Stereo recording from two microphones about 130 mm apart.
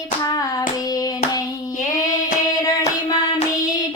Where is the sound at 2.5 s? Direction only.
30° left (ahead or behind).